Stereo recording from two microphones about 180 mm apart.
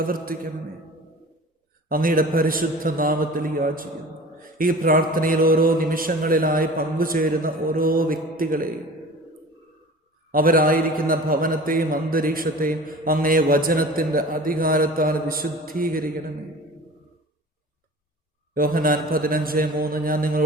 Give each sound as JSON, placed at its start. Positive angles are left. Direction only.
{"t": 0.0, "sound": "a man's voice", "side_deg": -50}
{"t": 1.9, "sound": "a man's voice", "side_deg": -50}
{"t": 10.3, "sound": "a man's voice", "side_deg": -50}
{"t": 18.5, "sound": "a man's voice", "side_deg": -50}